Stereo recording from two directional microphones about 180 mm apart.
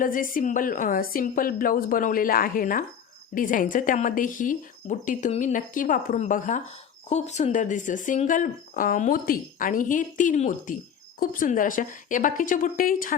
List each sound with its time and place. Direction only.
0.0 s speech: 50° left (ahead or behind)